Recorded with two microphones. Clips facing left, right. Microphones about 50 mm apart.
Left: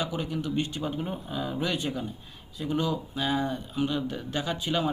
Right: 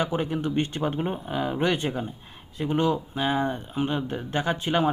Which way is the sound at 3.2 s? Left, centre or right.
Right.